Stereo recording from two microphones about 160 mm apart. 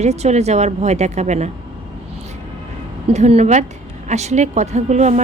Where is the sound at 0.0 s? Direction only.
45° right (ahead or behind).